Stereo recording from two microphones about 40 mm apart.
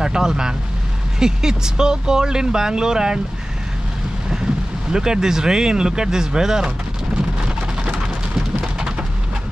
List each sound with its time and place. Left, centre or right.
0.0 s speech: centre
4.9 s speech: centre
7.2 s rain: right